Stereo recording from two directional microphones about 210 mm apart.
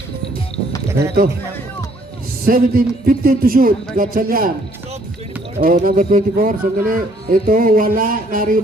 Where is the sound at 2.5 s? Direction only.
45° right (ahead or behind).